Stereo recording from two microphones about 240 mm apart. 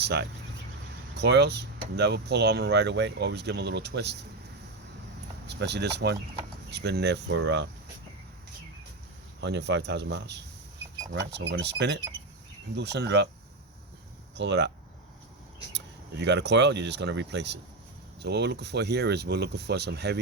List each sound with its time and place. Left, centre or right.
0.0 s speech: right
5.5 s speech: right
9.4 s speech: right
14.3 s speech: right
15.7 s speech: right